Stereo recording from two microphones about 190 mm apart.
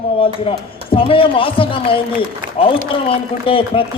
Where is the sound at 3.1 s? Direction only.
30° left (ahead or behind).